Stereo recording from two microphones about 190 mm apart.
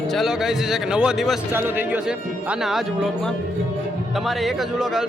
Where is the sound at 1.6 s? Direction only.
10° right (ahead or behind).